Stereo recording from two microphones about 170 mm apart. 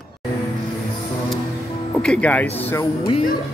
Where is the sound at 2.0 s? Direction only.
5° left (ahead or behind).